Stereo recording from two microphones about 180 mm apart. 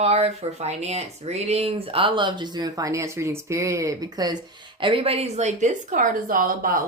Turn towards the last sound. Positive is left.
turn(degrees=-50)  # may be behind; listen again after turning